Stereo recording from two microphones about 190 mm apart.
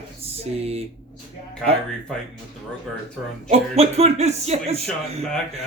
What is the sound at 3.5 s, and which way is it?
Speech, 35° right (ahead or behind).